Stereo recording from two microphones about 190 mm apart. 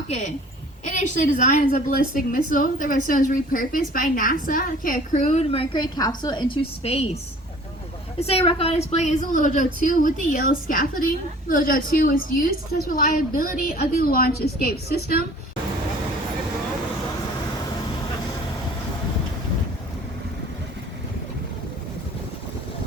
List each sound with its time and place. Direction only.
0.1 s a woman's voice: 40° left (ahead or behind)
8.2 s a woman's voice: 30° left (ahead or behind); by 15.2 s 55° left (ahead or behind)